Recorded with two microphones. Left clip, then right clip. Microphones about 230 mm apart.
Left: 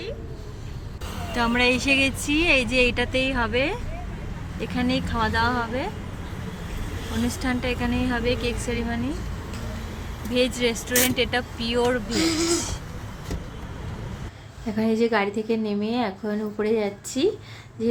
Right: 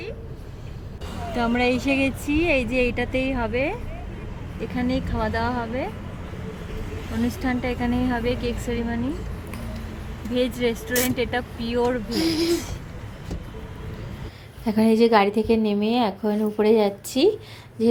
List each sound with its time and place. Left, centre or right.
1.3 s a woman's voice: centre
7.3 s a woman's voice: centre
10.3 s a woman's voice: centre
12.1 s speech: left
14.7 s a woman's voice: centre